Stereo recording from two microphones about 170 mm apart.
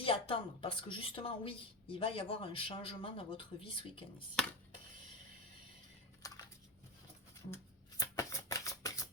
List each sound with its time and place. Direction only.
0.0 s a woman's voice: 30° left (ahead or behind)
6.2 s a sound: 20° left (ahead or behind)
7.5 s shuffling cards: 20° left (ahead or behind)